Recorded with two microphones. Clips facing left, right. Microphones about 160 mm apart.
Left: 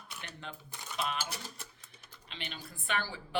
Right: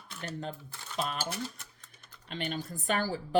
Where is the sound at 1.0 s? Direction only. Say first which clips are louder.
Right 2 dB; 40° right (ahead or behind).